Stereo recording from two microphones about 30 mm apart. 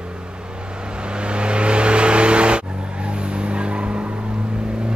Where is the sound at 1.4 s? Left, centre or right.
Right.